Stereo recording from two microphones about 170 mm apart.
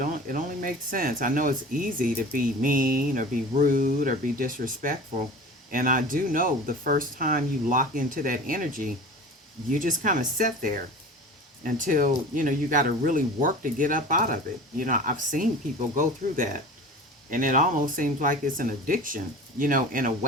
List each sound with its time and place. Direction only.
0.0 s speech: 55° right (ahead or behind)